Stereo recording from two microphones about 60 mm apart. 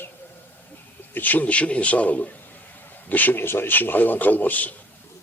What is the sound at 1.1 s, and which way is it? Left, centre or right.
A man's voice, left.